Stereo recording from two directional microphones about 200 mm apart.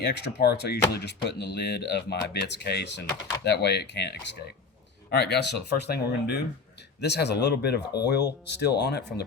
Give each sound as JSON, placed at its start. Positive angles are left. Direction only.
{"t": 0.0, "sound": "speech", "side_deg": 55}